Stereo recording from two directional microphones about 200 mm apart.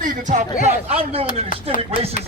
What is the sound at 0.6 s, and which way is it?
Speech, 30° right (ahead or behind).